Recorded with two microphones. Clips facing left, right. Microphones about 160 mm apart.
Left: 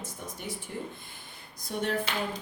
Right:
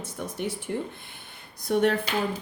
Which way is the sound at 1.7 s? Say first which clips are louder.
Right 9 dB; 70° right (ahead or behind).